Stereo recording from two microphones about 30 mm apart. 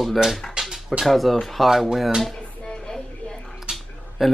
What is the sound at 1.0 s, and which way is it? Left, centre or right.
Speech, centre.